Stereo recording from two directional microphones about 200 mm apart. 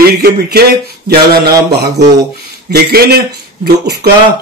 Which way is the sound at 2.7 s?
50° right (ahead or behind).